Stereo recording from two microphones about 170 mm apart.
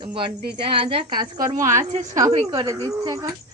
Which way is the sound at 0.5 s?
35° right (ahead or behind).